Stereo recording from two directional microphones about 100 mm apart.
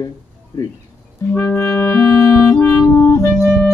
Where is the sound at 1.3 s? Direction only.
20° left (ahead or behind).